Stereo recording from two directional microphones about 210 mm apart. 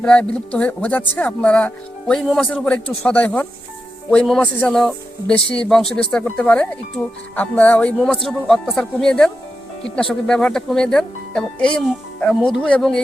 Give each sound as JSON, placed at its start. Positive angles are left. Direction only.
{"t": 0.0, "sound": "speech", "side_deg": 5}
{"t": 5.3, "sound": "speech", "side_deg": 25}
{"t": 5.6, "sound": "speech", "side_deg": 0}